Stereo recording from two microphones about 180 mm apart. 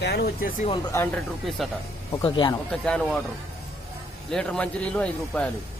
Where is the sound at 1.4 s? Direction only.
Centre (ahead or behind).